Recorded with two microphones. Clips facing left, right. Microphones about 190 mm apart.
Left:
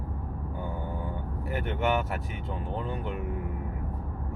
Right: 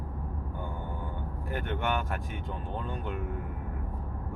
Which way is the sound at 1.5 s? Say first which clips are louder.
Left 4 dB; 5° left (ahead or behind).